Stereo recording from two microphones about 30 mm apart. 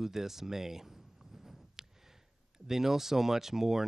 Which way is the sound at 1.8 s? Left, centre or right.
Centre.